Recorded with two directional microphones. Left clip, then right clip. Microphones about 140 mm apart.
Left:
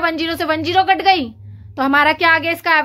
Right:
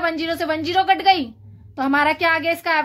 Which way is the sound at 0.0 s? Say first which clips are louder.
Left 3 dB; 40° left (ahead or behind).